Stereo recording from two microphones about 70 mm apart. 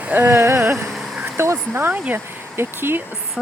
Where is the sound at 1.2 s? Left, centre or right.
Right.